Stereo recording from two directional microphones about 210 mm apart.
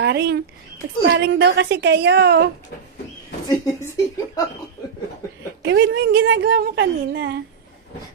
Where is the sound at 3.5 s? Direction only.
15° left (ahead or behind).